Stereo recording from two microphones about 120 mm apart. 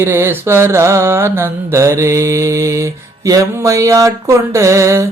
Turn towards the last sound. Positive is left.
turn(degrees=-25)  # may be behind; listen again after turning